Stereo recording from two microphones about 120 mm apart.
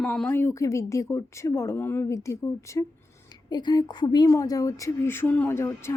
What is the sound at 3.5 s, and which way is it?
A woman's voice, 35° left (ahead or behind).